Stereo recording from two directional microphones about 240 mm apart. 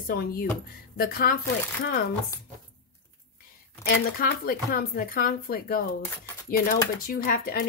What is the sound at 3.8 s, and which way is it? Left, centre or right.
Speech, left.